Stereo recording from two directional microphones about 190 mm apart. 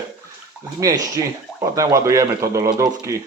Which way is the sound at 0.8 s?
20° right (ahead or behind).